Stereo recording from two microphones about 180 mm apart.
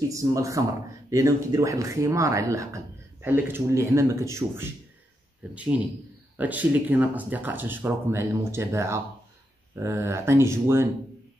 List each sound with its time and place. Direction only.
0.1 s speech: 15° right (ahead or behind)